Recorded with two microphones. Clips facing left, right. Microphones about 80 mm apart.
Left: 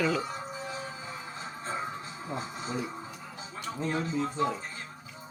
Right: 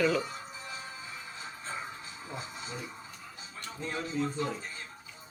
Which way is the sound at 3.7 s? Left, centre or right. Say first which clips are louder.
Left 5 dB; left.